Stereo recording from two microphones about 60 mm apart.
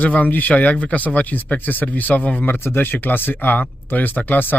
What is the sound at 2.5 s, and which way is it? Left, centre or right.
Speech, left.